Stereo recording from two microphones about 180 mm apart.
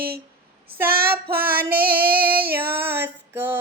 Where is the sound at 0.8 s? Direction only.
55° right (ahead or behind).